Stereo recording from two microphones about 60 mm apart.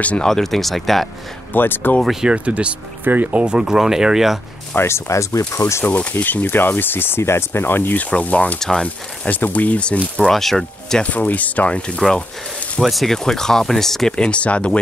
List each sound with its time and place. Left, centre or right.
0.2 s speech: centre
1.5 s speech: left
2.2 s speech: right
3.4 s speech: centre
4.7 s speech: left
5.9 s speech: left
6.4 s speech: left
8.5 s speech: centre
8.8 s speech: left
10.3 s speech: centre
11.0 s speech: left
12.0 s speech: centre